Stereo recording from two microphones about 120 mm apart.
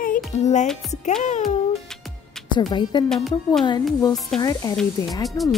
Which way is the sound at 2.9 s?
35° left (ahead or behind).